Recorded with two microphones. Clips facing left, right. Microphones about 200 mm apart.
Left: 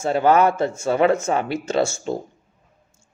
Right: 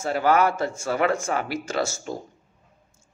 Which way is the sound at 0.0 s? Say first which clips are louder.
Left 4 dB; 25° left (ahead or behind).